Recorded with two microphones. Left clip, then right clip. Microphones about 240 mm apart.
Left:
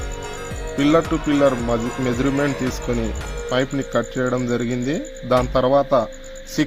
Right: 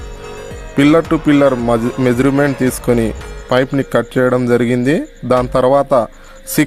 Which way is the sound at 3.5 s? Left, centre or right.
Right.